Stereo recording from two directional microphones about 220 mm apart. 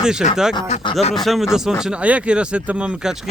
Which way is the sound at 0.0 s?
5° right (ahead or behind).